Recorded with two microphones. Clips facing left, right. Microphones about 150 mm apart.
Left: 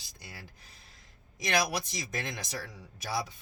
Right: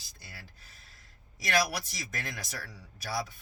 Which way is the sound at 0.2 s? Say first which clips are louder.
Left 3 dB; 15° left (ahead or behind).